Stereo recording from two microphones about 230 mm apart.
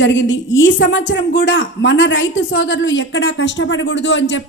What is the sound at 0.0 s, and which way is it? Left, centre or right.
A woman's voice, left.